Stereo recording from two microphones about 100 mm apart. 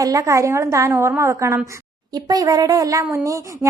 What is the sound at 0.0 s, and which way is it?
Speech, 35° right (ahead or behind).